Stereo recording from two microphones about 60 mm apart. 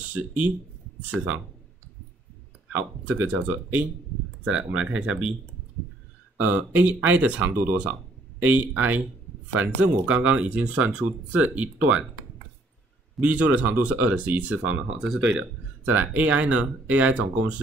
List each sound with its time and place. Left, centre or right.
0.1 s speech: right
2.7 s speech: right
6.4 s speech: right
13.2 s speech: right